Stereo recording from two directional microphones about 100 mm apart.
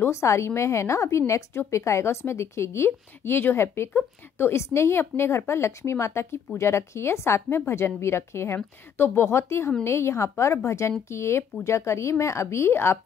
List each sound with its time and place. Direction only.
0.0 s a woman's voice: 30° left (ahead or behind)